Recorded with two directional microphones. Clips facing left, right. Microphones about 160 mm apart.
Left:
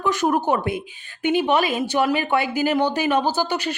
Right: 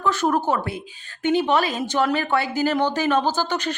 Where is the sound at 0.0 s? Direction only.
15° left (ahead or behind).